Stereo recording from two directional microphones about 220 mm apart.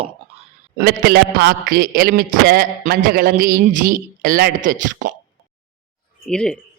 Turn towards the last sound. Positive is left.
turn(degrees=5)  # may be behind; listen again after turning